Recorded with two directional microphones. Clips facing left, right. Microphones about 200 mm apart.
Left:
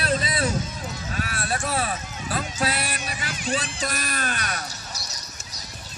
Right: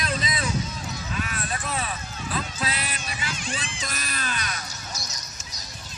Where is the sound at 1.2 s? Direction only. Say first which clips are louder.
Left 4 dB; 40° left (ahead or behind).